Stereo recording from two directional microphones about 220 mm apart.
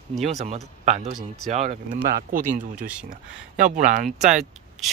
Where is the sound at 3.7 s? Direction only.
35° right (ahead or behind).